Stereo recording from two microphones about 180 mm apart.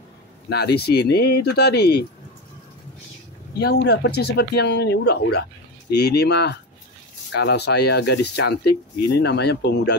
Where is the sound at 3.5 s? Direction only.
65° left (ahead or behind).